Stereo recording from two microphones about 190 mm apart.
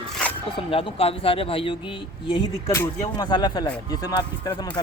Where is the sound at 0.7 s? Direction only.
30° left (ahead or behind).